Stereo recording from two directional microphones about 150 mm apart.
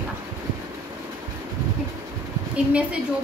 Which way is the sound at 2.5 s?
10° right (ahead or behind).